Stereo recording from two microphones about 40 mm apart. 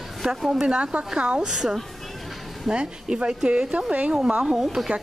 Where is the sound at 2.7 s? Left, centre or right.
Right.